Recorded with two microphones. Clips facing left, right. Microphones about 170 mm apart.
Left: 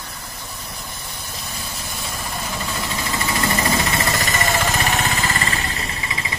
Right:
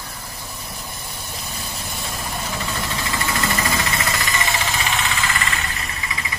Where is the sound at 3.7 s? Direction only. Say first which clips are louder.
Left 3 dB; 35° left (ahead or behind).